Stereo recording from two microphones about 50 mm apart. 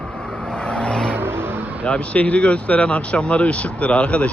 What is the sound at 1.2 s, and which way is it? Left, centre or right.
Vehicle, right.